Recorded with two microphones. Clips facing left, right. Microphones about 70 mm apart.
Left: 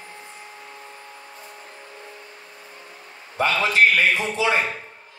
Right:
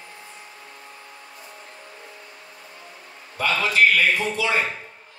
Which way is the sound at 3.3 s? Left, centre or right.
Left.